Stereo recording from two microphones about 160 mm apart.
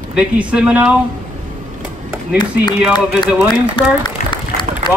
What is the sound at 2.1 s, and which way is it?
Speech, 10° right (ahead or behind).